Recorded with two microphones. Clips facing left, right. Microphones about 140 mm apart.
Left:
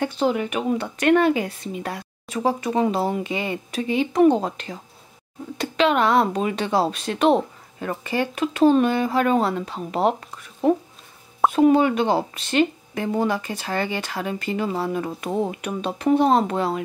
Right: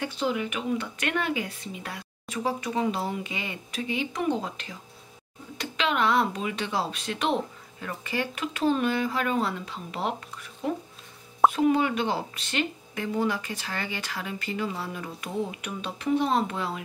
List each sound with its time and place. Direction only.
0.0 s a woman's voice: 45° left (ahead or behind)
11.5 s speech: 40° left (ahead or behind)